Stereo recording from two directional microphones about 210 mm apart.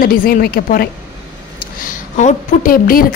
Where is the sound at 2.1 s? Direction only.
35° left (ahead or behind).